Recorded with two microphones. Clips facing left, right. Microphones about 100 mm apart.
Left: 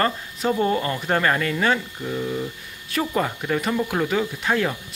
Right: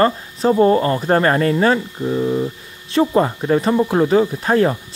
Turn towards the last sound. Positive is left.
turn(degrees=-35)  # may be behind; listen again after turning